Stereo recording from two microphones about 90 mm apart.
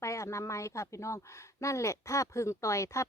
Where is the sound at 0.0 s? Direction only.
35° left (ahead or behind).